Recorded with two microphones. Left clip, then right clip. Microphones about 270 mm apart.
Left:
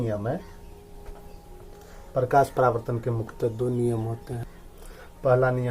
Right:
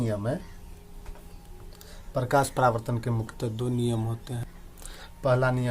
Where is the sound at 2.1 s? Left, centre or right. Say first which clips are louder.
Left 4 dB; right.